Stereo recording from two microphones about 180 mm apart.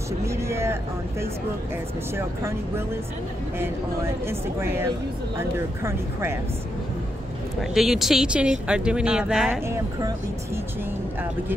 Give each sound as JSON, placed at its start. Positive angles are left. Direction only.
{"t": 0.2, "sound": "vehicle", "side_deg": -15}
{"t": 2.1, "sound": "speech", "side_deg": -15}
{"t": 7.7, "sound": "speech", "side_deg": 0}
{"t": 9.7, "sound": "speech", "side_deg": -15}